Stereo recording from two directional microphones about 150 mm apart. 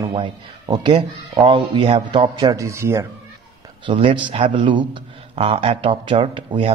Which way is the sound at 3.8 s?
35° right (ahead or behind).